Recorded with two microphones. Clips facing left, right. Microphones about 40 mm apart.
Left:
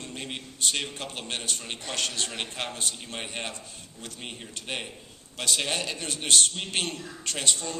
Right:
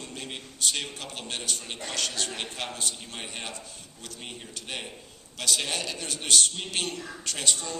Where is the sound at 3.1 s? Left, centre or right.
Centre.